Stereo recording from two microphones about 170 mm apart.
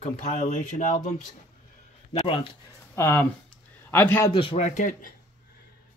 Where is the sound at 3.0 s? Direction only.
10° left (ahead or behind).